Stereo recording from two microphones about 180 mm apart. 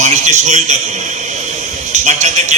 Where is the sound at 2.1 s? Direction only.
40° right (ahead or behind).